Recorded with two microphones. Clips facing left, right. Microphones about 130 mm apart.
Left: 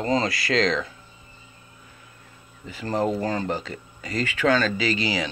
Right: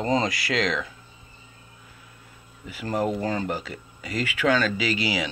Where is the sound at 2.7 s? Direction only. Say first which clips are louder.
Left 1 dB; 10° right (ahead or behind).